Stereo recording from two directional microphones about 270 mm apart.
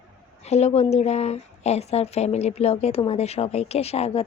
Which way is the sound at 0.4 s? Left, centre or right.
Left.